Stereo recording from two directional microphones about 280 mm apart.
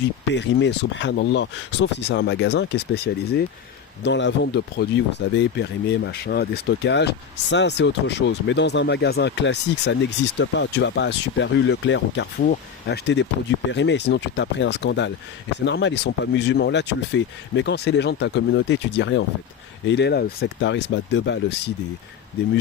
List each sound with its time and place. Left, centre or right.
0.3 s speech: left